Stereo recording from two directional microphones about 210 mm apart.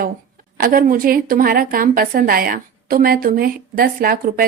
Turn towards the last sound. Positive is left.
turn(degrees=-45)  # may be behind; listen again after turning